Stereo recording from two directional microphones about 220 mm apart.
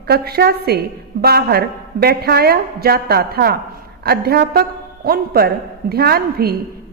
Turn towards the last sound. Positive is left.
turn(degrees=-45)  # may be behind; listen again after turning